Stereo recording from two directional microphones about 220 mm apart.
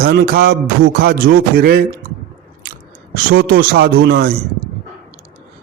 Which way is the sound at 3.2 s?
45° right (ahead or behind).